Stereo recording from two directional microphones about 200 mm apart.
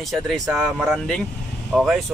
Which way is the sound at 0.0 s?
Centre (ahead or behind).